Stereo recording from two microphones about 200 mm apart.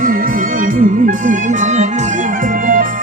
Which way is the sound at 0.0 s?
45° right (ahead or behind).